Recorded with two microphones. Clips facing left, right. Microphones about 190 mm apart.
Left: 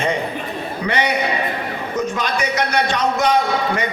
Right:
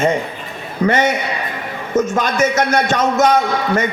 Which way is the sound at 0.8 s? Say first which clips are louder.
Right 4 dB; 45° right (ahead or behind).